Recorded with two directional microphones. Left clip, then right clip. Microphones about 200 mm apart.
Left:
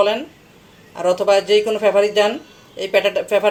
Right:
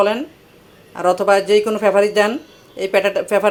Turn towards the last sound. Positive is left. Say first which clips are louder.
# even
turn(degrees=-20)  # may be behind; listen again after turning